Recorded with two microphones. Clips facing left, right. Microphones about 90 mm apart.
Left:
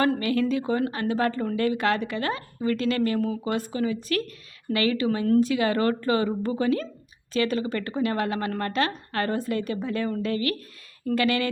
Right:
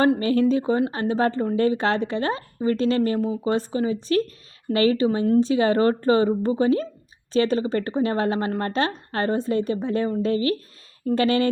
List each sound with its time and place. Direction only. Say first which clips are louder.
0.2 s a woman's voice: right 4 dB; 30° right (ahead or behind)